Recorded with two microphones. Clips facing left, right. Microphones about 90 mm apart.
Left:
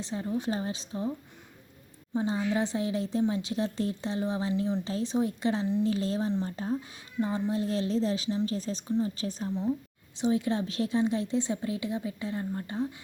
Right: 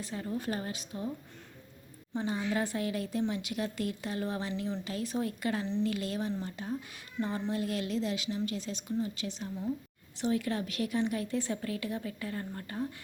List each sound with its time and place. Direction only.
0.0 s a woman's voice: 25° left (ahead or behind)
2.1 s a woman's voice: 25° left (ahead or behind)
7.2 s speech: 15° left (ahead or behind)
7.5 s speech: 30° left (ahead or behind)
8.9 s a woman's voice: 25° left (ahead or behind)
9.1 s speech: 40° left (ahead or behind)
10.2 s a woman's voice: 20° left (ahead or behind)